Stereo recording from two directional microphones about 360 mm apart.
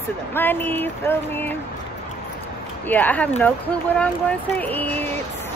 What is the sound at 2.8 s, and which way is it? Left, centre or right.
Speech, centre.